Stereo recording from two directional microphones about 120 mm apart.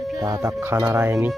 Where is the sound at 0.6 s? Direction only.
25° right (ahead or behind).